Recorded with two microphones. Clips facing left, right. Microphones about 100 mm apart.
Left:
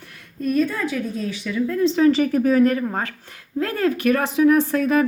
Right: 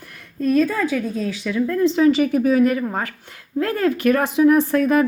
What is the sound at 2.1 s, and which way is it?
Speech, 5° right (ahead or behind).